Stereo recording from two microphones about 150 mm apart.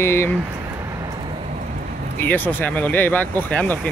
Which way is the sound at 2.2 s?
10° left (ahead or behind).